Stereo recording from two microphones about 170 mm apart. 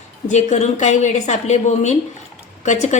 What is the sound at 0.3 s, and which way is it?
A woman's voice, 45° left (ahead or behind).